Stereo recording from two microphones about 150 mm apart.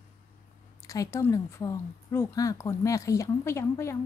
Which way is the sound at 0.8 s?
25° left (ahead or behind).